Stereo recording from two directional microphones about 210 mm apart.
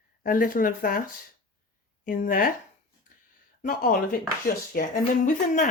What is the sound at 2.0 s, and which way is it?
Speech, 40° left (ahead or behind).